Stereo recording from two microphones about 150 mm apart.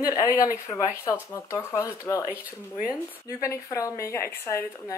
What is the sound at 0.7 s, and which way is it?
Speech, 20° left (ahead or behind).